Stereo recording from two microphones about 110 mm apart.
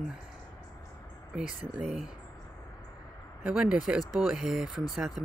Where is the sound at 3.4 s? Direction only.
5° right (ahead or behind).